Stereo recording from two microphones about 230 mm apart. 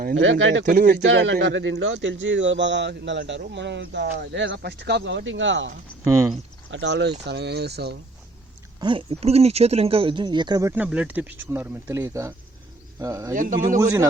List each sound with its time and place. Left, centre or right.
0.2 s speech: right
0.6 s speech: right
1.0 s speech: right
6.1 s speech: centre
6.7 s speech: right
8.8 s speech: right
13.3 s speech: right
13.7 s speech: centre